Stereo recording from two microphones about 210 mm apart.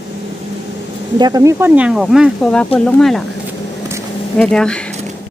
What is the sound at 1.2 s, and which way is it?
A woman's voice, 20° right (ahead or behind).